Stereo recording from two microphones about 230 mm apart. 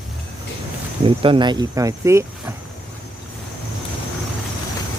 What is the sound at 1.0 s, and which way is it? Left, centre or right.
Speech, right.